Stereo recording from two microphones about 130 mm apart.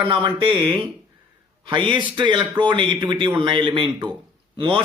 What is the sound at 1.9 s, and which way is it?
A man's voice, 40° right (ahead or behind).